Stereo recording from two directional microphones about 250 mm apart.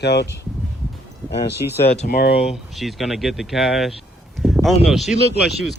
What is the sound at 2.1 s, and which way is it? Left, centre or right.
Speech, left.